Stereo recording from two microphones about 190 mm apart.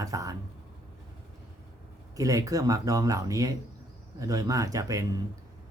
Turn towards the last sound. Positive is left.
turn(degrees=-15)  # may be behind; listen again after turning